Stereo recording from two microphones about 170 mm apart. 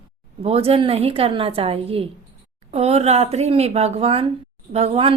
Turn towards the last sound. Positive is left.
turn(degrees=-35)  # may be behind; listen again after turning